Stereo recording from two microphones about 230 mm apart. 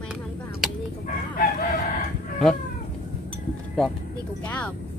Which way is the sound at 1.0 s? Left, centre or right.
Left.